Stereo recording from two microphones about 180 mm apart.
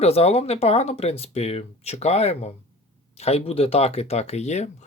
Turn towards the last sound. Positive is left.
turn(degrees=40)  # may be behind; listen again after turning